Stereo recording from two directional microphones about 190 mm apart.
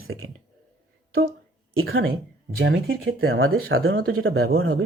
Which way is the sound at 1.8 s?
90° right.